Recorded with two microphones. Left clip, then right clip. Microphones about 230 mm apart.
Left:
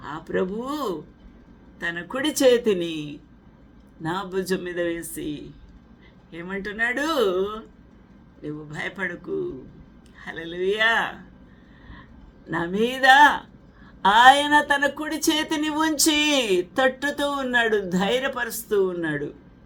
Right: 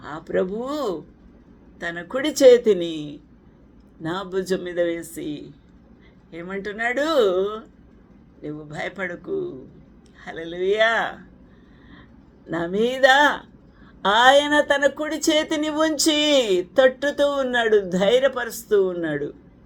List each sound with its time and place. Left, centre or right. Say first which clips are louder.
0.1 s speech: right 3 dB; centre
0.5 s speech: right 2 dB; left
1.9 s speech: right 1 dB; centre
6.9 s speech: right 6 dB; left
10.2 s speech: right 1 dB; centre
10.6 s speech: right 2 dB; left
12.5 s speech: right 2 dB; centre